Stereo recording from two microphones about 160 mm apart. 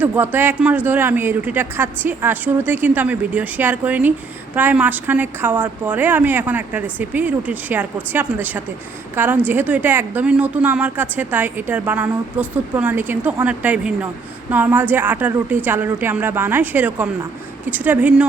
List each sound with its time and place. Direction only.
0.0 s a woman's voice: 10° right (ahead or behind)